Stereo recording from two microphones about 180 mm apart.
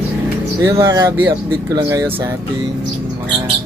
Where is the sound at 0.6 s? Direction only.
15° right (ahead or behind).